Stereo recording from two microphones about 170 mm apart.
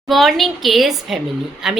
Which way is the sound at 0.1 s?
Centre (ahead or behind).